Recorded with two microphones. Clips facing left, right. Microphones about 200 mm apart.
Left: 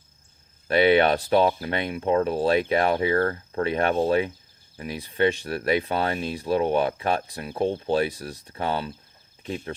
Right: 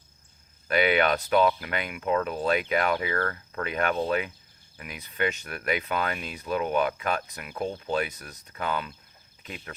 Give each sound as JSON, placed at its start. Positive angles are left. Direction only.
{"t": 0.7, "sound": "speech", "side_deg": 30}